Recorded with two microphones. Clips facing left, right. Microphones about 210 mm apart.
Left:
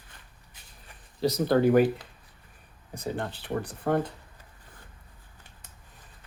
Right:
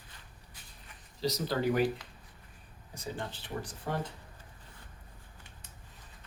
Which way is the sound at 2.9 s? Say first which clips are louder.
Left 7 dB; 60° left (ahead or behind).